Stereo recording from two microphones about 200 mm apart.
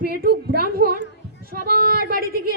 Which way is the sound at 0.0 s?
50° right (ahead or behind).